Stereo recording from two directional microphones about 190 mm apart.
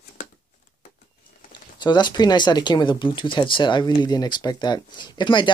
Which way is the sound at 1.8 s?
25° left (ahead or behind).